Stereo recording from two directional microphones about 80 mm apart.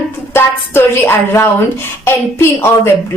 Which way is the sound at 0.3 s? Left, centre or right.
Left.